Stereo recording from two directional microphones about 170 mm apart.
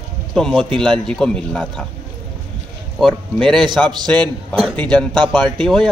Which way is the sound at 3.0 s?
Centre (ahead or behind).